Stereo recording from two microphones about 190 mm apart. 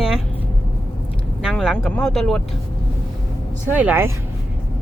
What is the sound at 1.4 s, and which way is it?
Speech, centre (ahead or behind).